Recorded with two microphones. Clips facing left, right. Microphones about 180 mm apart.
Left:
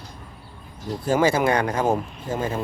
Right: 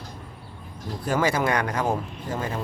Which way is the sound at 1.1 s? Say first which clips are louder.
Left 4 dB; 25° left (ahead or behind).